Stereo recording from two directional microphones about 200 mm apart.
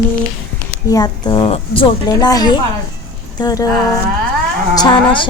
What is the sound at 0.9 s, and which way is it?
A woman's voice, 20° left (ahead or behind).